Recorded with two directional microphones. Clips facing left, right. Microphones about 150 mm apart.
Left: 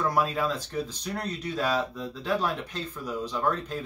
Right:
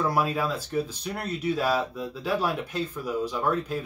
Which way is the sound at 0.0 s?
10° right (ahead or behind).